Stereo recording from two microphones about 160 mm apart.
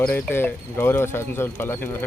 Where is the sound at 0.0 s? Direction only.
15° left (ahead or behind).